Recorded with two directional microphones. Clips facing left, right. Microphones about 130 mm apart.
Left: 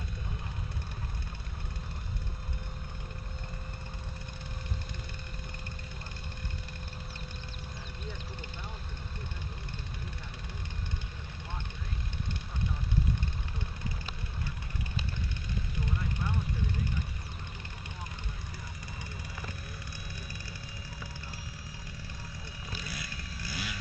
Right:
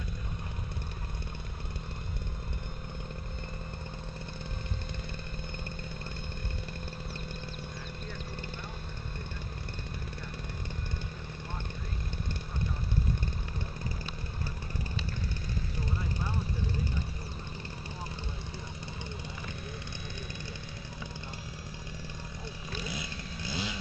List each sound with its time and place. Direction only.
22.8 s vehicle: 25° right (ahead or behind)